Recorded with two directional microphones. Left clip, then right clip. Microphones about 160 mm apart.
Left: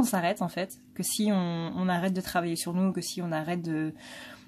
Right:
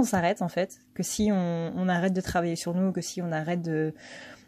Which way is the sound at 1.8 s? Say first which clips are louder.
Right 2 dB; 35° right (ahead or behind).